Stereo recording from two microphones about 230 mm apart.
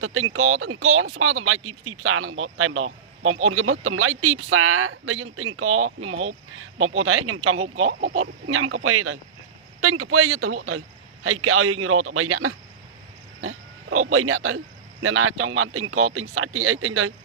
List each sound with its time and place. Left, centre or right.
0.0 s a man's voice: right